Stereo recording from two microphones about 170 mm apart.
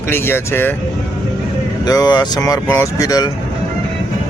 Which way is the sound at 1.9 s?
25° left (ahead or behind).